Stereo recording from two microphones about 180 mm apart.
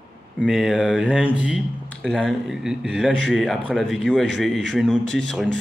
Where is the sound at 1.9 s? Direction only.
5° left (ahead or behind).